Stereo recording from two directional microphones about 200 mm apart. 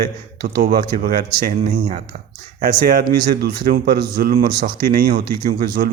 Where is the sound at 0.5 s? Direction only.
50° right (ahead or behind).